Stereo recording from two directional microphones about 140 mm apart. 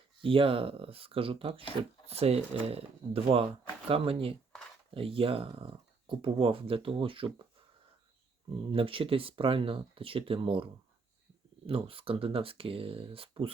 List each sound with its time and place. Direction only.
0.2 s speech: 40° right (ahead or behind)
8.5 s speech: 40° right (ahead or behind)